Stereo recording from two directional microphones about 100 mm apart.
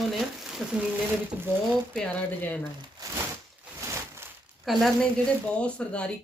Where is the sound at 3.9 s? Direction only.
25° right (ahead or behind).